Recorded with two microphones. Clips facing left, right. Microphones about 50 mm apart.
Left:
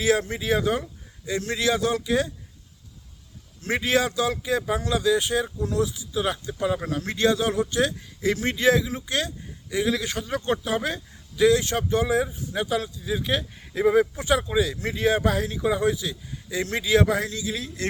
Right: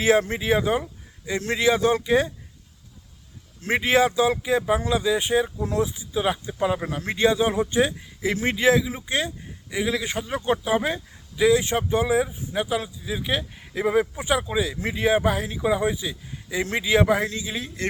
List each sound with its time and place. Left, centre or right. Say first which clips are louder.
0.0 s speech: right 3 dB; right
3.6 s speech: right 3 dB; right